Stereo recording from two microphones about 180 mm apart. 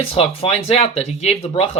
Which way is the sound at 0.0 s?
30° left (ahead or behind).